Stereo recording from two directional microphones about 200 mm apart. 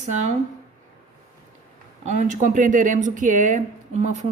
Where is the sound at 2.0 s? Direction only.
40° right (ahead or behind).